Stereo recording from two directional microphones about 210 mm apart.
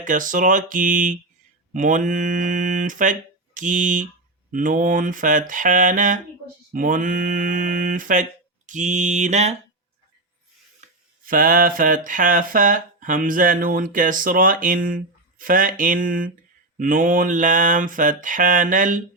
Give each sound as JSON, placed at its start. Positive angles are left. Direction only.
{"t": 0.0, "sound": "speech", "side_deg": -40}
{"t": 11.3, "sound": "speech", "side_deg": -40}